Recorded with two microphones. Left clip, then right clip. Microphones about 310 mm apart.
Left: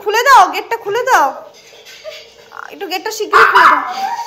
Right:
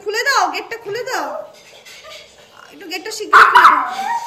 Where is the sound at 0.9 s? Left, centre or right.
Left.